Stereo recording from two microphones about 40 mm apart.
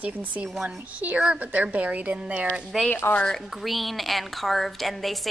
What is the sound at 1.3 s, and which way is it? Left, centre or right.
A woman's voice, right.